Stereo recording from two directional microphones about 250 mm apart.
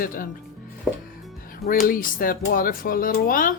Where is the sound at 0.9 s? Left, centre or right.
Centre.